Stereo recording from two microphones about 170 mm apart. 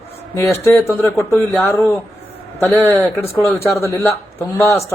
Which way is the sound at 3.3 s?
15° left (ahead or behind).